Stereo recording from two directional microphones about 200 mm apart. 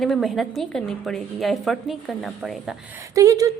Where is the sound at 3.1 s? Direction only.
15° right (ahead or behind).